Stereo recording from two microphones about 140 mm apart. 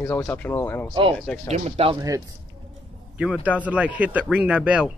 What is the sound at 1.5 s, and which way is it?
Speech, 50° right (ahead or behind).